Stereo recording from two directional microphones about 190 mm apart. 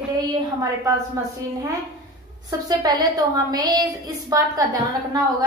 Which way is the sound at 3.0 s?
20° right (ahead or behind).